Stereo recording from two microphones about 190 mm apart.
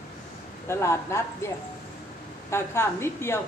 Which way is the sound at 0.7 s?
15° left (ahead or behind).